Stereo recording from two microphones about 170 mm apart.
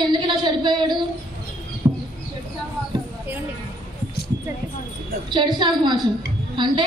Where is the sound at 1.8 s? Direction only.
35° right (ahead or behind).